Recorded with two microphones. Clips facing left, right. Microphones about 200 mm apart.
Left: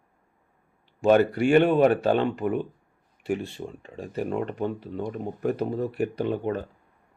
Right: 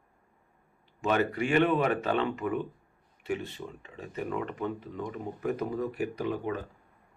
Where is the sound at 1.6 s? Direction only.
30° left (ahead or behind).